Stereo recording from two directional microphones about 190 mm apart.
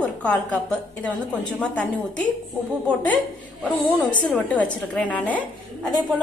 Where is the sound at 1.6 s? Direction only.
5° left (ahead or behind).